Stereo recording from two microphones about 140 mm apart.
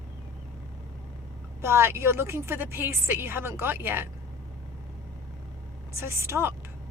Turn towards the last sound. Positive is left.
turn(degrees=-20)  # may be behind; listen again after turning